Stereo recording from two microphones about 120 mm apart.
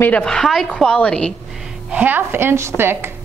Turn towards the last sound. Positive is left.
turn(degrees=-20)  # may be behind; listen again after turning